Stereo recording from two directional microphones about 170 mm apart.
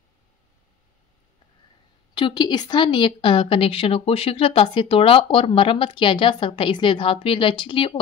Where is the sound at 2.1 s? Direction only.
25° left (ahead or behind).